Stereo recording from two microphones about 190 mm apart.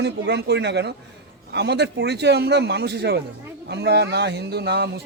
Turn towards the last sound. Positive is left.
turn(degrees=-60)  # may be behind; listen again after turning